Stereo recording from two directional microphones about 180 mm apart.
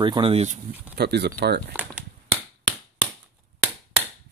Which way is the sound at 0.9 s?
65° right (ahead or behind).